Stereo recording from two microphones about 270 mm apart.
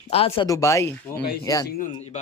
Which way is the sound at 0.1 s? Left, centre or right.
Left.